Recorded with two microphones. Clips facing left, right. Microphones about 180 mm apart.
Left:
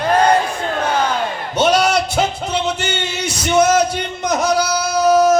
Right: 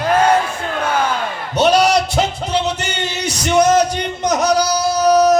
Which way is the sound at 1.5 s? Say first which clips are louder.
Right 2 dB; centre (ahead or behind).